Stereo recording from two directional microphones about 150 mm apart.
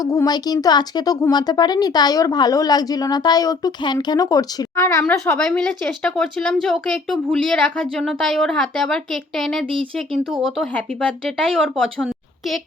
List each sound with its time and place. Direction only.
0.0 s speech: 20° left (ahead or behind)
5.5 s speech: 5° left (ahead or behind)
10.6 s speech: 5° left (ahead or behind)